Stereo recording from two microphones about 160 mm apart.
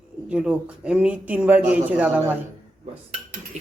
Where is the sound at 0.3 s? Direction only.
5° right (ahead or behind).